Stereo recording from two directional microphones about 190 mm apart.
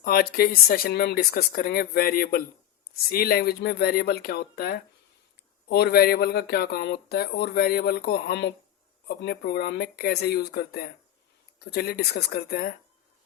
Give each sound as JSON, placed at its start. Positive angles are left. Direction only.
{"t": 0.0, "sound": "speech", "side_deg": 50}